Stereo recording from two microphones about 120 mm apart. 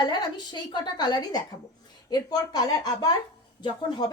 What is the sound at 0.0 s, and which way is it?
A woman's voice, 35° left (ahead or behind).